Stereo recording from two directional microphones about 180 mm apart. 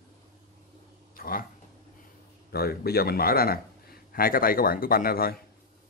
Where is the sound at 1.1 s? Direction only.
55° left (ahead or behind).